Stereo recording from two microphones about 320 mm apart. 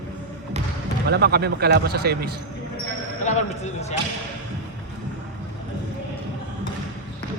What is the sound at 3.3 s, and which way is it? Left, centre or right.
Speech, left.